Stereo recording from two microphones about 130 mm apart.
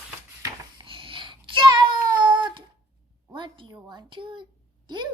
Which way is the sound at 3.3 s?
35° right (ahead or behind).